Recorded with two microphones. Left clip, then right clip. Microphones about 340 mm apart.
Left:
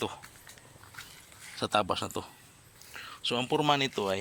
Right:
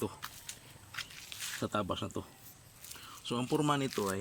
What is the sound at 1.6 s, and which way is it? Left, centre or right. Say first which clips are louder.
Speech: left 8 dB; centre.